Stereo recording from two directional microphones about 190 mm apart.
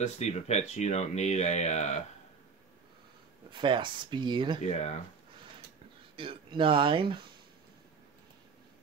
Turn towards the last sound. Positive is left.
turn(degrees=-25)  # may be behind; listen again after turning